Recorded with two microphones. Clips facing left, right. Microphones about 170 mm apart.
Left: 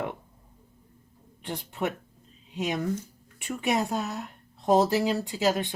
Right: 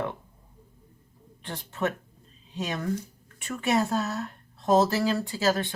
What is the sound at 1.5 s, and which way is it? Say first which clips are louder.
Speech: right 1 dB; 15° left (ahead or behind).